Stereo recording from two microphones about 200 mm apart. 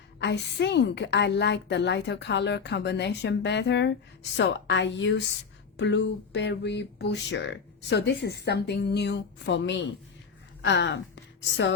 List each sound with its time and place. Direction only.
0.2 s a woman's voice: 60° left (ahead or behind)